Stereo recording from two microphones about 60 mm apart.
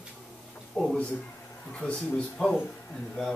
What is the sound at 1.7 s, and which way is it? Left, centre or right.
Speech, left.